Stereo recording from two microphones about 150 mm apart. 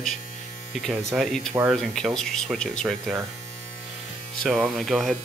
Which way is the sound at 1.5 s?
10° right (ahead or behind).